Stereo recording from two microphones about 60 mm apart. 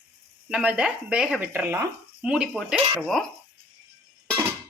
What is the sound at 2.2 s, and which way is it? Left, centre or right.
Speech, centre.